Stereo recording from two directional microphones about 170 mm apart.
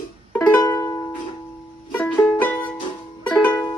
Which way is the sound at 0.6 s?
20° left (ahead or behind).